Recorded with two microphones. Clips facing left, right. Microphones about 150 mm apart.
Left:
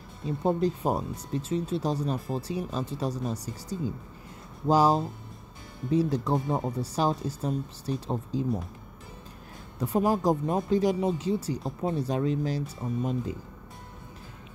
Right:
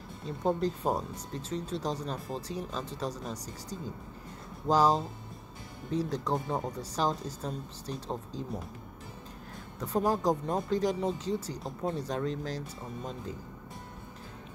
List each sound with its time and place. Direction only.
0.4 s speech: 10° left (ahead or behind)
4.6 s speech: 10° left (ahead or behind)
9.8 s speech: 10° left (ahead or behind)